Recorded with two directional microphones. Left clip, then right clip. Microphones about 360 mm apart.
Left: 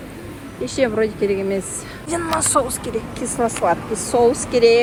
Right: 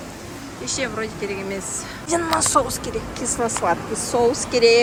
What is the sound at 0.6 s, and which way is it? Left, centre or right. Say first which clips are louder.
Speech: left 7 dB; centre.